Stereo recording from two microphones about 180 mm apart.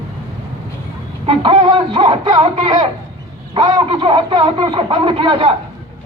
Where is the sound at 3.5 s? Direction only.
20° right (ahead or behind).